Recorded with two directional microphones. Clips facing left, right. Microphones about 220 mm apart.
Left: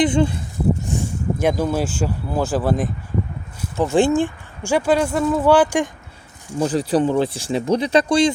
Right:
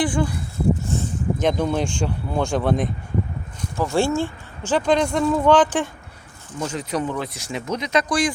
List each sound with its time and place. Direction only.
0.0 s speech: 25° left (ahead or behind)
0.9 s speech: 10° left (ahead or behind)
3.8 s speech: 15° left (ahead or behind)
6.6 s speech: 35° left (ahead or behind)